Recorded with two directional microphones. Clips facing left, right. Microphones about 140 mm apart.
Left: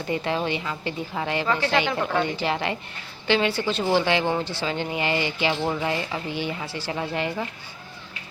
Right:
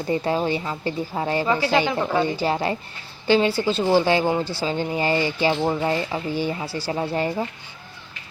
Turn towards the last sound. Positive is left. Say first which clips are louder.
# right 3 dB
turn(degrees=-35)  # may be behind; listen again after turning